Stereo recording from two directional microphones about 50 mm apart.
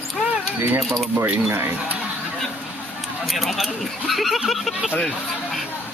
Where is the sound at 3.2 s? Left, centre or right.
Centre.